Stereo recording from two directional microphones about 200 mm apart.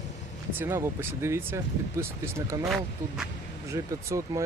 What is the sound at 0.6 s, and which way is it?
Speech, 15° right (ahead or behind).